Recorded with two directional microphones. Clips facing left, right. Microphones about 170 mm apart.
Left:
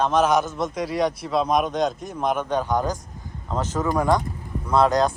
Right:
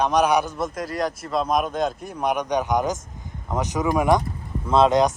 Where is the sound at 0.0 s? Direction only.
10° right (ahead or behind).